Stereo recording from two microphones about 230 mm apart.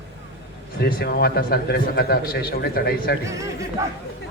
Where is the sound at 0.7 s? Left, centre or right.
Left.